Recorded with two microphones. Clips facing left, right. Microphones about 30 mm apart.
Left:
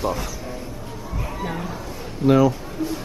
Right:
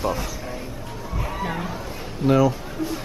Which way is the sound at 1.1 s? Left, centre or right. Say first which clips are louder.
Right 1 dB; centre.